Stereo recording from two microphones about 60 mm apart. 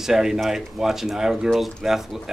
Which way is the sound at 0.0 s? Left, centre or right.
Centre.